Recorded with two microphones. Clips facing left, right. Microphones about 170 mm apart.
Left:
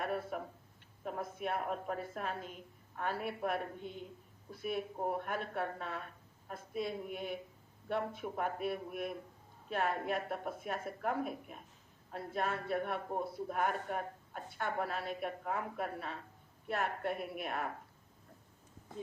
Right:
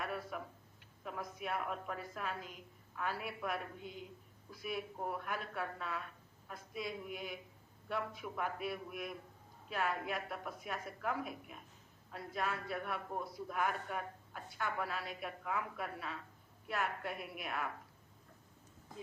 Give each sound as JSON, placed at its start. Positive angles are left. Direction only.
{"t": 0.0, "sound": "a sound", "side_deg": 45}
{"t": 1.4, "sound": "a woman's voice", "side_deg": 40}
{"t": 3.8, "sound": "a woman's voice", "side_deg": -5}
{"t": 4.5, "sound": "a woman's voice", "side_deg": 45}